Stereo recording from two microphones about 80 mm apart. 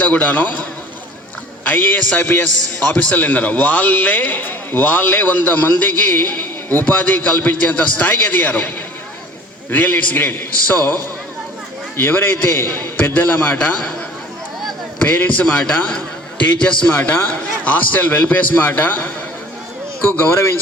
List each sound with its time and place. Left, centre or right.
0.0 s a man's voice: centre
11.9 s a man's voice: left
15.2 s a man's voice: left
15.5 s a man's voice: centre
20.1 s a man's voice: left